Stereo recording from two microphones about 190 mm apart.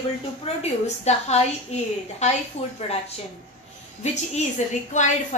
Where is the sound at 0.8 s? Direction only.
35° left (ahead or behind).